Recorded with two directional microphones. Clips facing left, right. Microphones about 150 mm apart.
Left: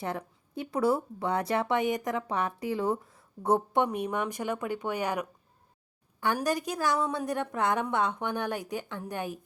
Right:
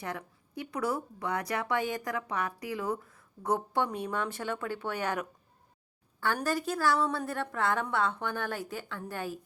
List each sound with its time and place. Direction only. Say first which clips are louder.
0.0 s a woman's voice: left 4 dB; 25° left (ahead or behind)